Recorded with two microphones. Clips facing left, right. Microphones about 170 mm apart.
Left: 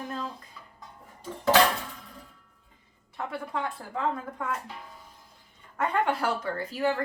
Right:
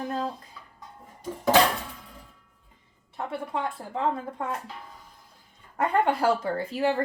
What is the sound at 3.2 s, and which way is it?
Speech, 25° right (ahead or behind).